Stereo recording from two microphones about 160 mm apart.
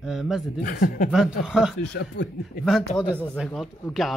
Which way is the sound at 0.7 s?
55° left (ahead or behind).